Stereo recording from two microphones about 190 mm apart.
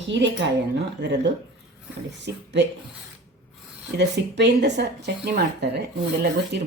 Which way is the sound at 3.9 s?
65° right (ahead or behind).